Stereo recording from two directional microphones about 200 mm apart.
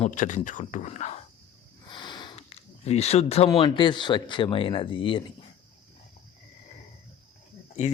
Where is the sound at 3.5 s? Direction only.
25° left (ahead or behind).